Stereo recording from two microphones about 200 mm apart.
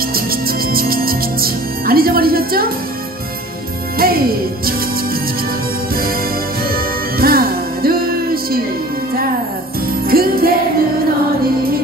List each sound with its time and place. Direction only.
0.1 s music: 50° right (ahead or behind)
4.0 s speech: 50° right (ahead or behind)
6.7 s music: 50° right (ahead or behind)
10.0 s music: 45° right (ahead or behind)